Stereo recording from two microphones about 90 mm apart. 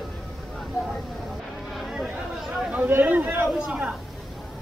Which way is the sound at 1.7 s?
Centre (ahead or behind).